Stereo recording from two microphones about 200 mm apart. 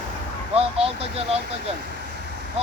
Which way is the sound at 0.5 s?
30° right (ahead or behind).